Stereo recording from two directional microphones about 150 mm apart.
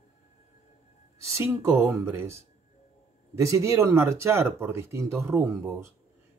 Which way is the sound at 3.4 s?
20° right (ahead or behind).